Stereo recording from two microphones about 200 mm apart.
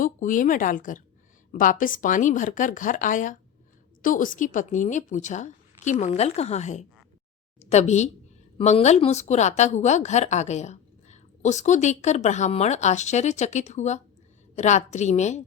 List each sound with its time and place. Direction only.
0.0 s a woman's voice: 40° left (ahead or behind)